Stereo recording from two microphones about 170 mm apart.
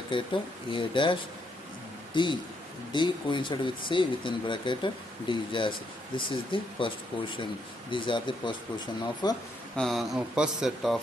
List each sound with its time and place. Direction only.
0.1 s speech: 30° left (ahead or behind)
2.1 s speech: 30° left (ahead or behind)
7.9 s speech: 30° left (ahead or behind)
9.8 s speech: centre (ahead or behind)